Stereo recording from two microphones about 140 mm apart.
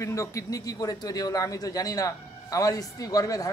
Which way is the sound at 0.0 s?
20° left (ahead or behind).